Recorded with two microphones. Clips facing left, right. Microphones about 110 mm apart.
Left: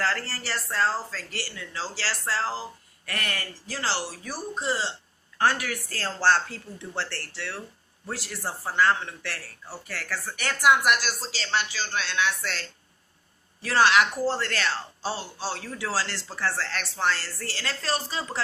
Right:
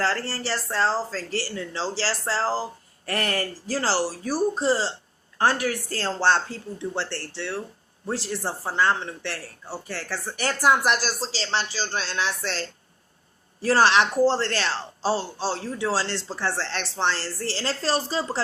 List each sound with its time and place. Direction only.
0.0 s a woman's voice: 30° right (ahead or behind)